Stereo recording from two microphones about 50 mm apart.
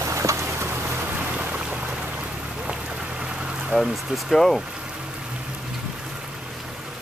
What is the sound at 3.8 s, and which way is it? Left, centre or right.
Speech, centre.